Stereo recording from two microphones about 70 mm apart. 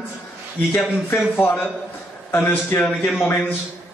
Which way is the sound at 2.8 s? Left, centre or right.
Centre.